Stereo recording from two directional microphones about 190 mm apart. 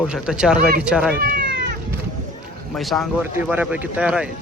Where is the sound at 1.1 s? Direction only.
50° right (ahead or behind).